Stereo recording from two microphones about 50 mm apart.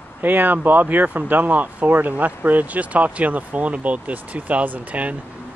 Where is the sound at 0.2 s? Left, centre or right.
Right.